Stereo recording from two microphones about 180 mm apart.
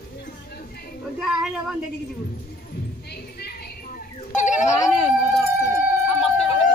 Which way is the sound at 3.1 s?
60° left (ahead or behind).